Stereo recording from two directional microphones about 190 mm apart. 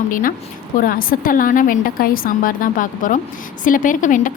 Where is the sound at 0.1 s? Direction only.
45° left (ahead or behind).